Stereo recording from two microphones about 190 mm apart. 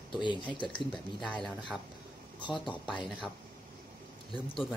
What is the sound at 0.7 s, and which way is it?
Speech, 5° left (ahead or behind).